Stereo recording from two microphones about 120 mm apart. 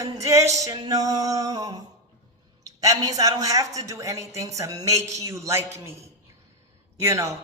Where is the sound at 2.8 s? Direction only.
30° right (ahead or behind).